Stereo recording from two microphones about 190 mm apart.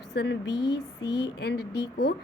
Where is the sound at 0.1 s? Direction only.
65° left (ahead or behind).